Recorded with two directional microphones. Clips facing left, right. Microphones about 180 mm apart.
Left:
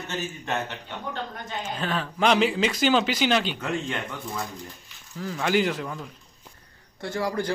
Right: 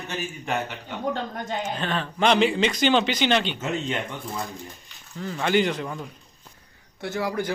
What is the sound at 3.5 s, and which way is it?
Speech, 20° right (ahead or behind).